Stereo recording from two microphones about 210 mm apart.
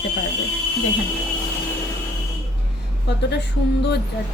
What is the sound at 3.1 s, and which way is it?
Speech, 55° left (ahead or behind).